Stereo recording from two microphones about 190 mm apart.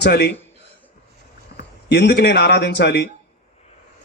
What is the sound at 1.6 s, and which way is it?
Speech, 60° left (ahead or behind).